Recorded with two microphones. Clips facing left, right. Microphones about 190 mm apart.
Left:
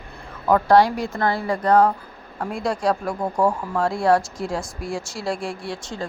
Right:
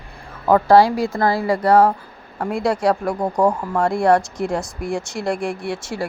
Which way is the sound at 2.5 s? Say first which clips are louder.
Right 4 dB; 75° right (ahead or behind).